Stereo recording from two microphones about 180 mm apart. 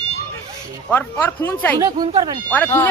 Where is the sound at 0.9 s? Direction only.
10° left (ahead or behind).